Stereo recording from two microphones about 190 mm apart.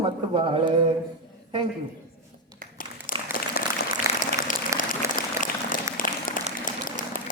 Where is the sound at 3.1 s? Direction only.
45° left (ahead or behind).